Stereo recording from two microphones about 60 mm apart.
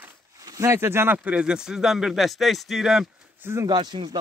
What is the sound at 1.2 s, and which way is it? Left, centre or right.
Speech, centre.